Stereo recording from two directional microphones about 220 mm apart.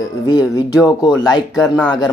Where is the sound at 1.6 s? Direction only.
5° left (ahead or behind).